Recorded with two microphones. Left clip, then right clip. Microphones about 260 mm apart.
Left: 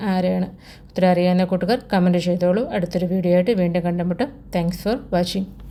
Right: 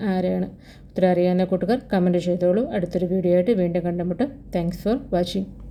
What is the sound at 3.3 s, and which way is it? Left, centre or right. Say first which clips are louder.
A woman's voice: left 2 dB; left.